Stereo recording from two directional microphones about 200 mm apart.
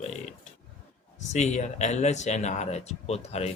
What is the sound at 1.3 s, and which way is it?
Speech, 35° left (ahead or behind).